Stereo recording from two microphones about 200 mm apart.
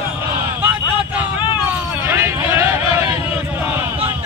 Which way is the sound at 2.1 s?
10° right (ahead or behind).